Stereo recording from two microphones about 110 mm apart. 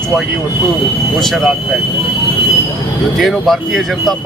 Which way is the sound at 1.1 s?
Centre (ahead or behind).